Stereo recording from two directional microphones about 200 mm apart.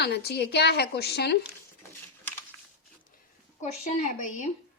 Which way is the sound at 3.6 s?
35° left (ahead or behind).